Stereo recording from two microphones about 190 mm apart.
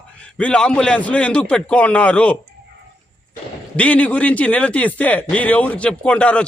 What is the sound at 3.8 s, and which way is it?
A man's voice, 5° left (ahead or behind).